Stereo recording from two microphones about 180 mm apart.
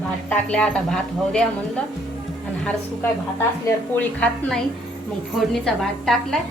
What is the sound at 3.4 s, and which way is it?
A woman's voice, 10° left (ahead or behind).